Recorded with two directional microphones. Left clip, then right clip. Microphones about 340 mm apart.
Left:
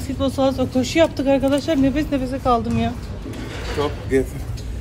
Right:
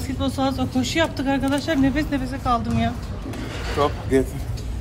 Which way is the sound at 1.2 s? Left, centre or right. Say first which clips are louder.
Left 5 dB; centre.